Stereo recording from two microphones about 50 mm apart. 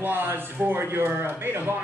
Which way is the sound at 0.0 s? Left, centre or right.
Right.